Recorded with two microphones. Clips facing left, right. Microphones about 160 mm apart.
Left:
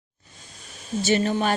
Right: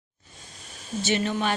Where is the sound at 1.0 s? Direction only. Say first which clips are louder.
Left 4 dB; 40° left (ahead or behind).